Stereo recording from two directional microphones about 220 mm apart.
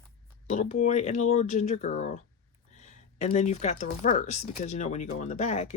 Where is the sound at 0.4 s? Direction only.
30° left (ahead or behind).